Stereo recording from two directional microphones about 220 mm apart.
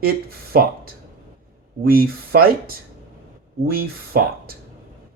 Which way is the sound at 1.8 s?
40° right (ahead or behind).